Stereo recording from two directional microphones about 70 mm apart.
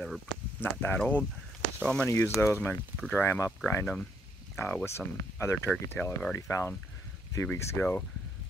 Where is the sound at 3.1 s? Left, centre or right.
Left.